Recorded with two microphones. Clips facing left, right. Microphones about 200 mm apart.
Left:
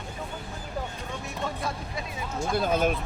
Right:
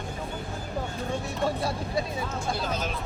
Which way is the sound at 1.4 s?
35° right (ahead or behind).